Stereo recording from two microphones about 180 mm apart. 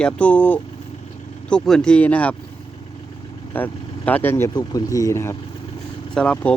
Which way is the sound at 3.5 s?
10° left (ahead or behind).